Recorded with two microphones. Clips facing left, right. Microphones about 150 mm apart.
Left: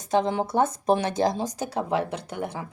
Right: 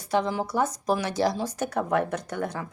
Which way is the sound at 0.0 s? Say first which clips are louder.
Left 2 dB; 20° left (ahead or behind).